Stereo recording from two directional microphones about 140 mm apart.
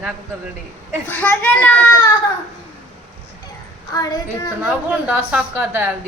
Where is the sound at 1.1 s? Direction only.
10° left (ahead or behind).